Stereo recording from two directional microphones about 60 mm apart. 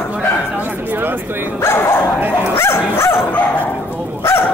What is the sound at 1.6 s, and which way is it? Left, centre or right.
Dog, left.